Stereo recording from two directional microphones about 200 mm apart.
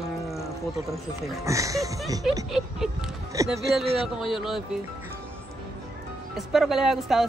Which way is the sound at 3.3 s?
15° right (ahead or behind).